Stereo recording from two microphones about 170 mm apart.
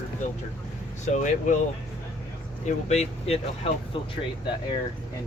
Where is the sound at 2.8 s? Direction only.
40° left (ahead or behind).